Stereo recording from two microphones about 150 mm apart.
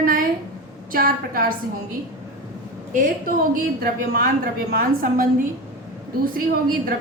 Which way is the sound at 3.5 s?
75° right (ahead or behind).